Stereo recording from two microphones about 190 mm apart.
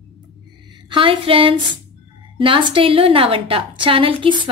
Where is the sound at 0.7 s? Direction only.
25° right (ahead or behind).